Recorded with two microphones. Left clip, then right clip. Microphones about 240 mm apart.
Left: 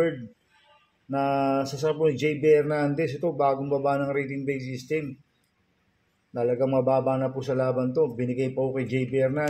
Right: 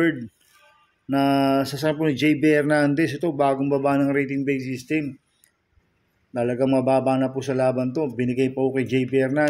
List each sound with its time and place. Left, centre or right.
1.1 s speech: right
6.3 s speech: right